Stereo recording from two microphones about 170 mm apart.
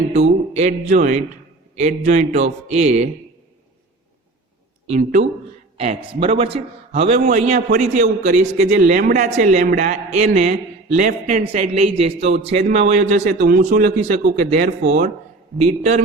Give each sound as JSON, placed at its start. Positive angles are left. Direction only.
{"t": 0.1, "sound": "a man's voice", "side_deg": -40}
{"t": 4.9, "sound": "a man's voice", "side_deg": -50}
{"t": 5.7, "sound": "a man's voice", "side_deg": -35}
{"t": 12.7, "sound": "a man's voice", "side_deg": -50}